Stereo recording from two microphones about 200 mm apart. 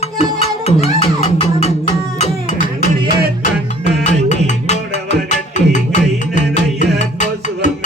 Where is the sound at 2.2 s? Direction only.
35° left (ahead or behind).